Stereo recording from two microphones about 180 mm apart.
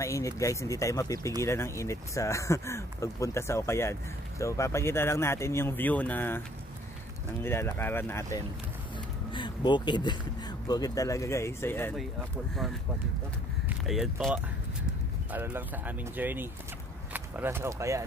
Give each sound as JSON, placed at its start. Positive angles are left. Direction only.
{"t": 0.0, "sound": "speech", "side_deg": 15}
{"t": 7.4, "sound": "speech", "side_deg": 15}
{"t": 13.7, "sound": "speech", "side_deg": 0}